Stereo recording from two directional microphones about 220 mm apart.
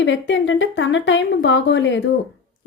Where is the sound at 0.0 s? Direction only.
55° left (ahead or behind).